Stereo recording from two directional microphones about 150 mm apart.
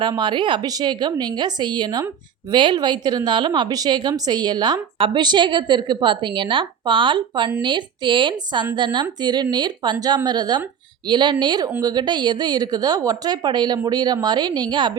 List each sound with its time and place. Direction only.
0.0 s a woman's voice: 30° right (ahead or behind)